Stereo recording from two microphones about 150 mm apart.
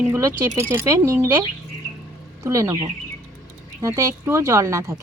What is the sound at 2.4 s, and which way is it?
Speech, 25° right (ahead or behind).